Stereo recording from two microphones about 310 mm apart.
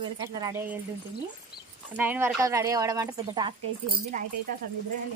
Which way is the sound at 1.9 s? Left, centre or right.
Centre.